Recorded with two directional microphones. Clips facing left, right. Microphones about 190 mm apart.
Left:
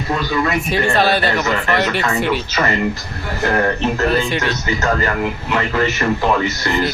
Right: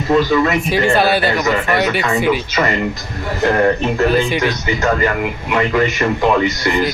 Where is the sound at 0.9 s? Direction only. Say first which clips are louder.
Right 1 dB; 5° right (ahead or behind).